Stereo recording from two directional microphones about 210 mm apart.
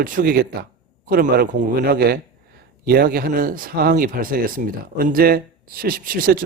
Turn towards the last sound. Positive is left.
turn(degrees=-40)  # may be behind; listen again after turning